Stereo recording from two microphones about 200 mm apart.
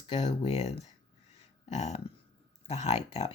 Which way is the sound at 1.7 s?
35° left (ahead or behind).